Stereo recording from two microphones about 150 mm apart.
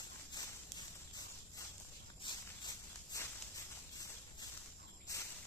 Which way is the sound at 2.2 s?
25° left (ahead or behind).